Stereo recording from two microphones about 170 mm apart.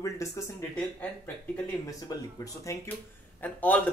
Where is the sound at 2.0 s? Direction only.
20° left (ahead or behind).